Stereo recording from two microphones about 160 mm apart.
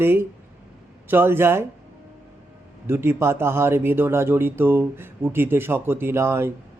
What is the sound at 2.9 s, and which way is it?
Speech, 15° right (ahead or behind).